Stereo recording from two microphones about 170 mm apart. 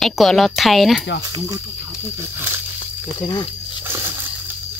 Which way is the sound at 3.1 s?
25° left (ahead or behind).